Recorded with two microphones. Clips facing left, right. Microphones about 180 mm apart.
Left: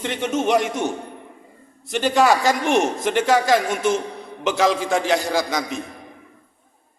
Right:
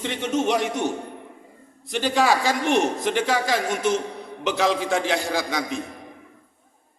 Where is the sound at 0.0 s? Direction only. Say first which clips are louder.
Left 1 dB; 50° left (ahead or behind).